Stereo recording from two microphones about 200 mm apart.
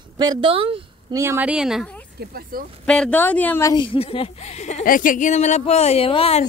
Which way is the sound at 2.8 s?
5° left (ahead or behind).